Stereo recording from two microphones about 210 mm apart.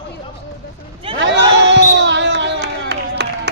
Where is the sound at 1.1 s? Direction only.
55° right (ahead or behind).